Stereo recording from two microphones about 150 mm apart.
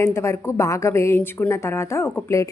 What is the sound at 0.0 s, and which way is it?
A woman's voice, 20° left (ahead or behind).